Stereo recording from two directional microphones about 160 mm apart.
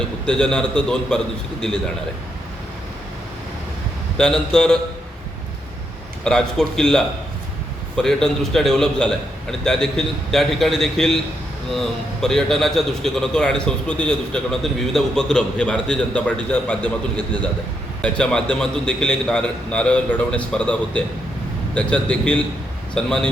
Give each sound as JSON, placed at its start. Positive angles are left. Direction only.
{"t": 0.0, "sound": "a man's voice", "side_deg": 5}
{"t": 4.2, "sound": "a man's voice", "side_deg": 5}
{"t": 6.2, "sound": "a man's voice", "side_deg": 5}
{"t": 18.0, "sound": "a man's voice", "side_deg": 5}